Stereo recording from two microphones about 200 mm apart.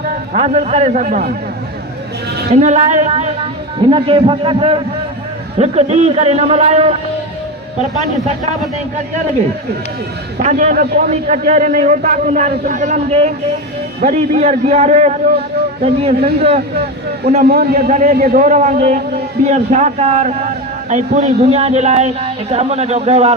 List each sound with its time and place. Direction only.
0.0 s a sound: 45° right (ahead or behind)
0.4 s a man's voice: 35° right (ahead or behind)
2.5 s a man's voice: 35° right (ahead or behind)
10.4 s a man's voice: 35° right (ahead or behind)
17.5 s a man's voice: 50° right (ahead or behind)
17.8 s a man's voice: 35° right (ahead or behind)
18.1 s a man's voice: 50° right (ahead or behind)
18.4 s a man's voice: 35° right (ahead or behind)